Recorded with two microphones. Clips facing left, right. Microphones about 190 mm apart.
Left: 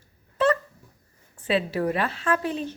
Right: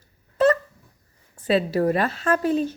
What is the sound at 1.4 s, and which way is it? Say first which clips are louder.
A woman's voice: right 4 dB; 40° right (ahead or behind).